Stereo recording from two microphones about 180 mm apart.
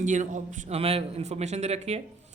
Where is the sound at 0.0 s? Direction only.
45° right (ahead or behind).